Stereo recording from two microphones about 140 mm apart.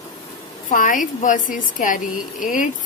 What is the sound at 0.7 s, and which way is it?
A woman's voice, 75° left (ahead or behind).